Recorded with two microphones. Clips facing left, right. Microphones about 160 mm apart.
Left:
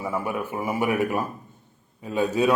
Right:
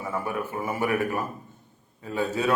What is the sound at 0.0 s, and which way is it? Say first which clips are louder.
A man's voice: left 2 dB; 15° left (ahead or behind).